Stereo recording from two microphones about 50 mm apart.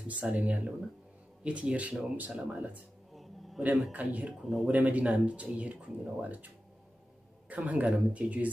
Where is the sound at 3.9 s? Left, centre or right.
Right.